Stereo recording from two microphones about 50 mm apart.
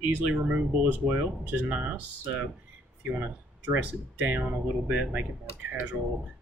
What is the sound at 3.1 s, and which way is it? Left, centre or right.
Speech, right.